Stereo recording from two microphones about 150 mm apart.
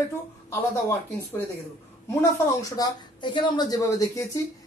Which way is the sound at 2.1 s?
20° left (ahead or behind).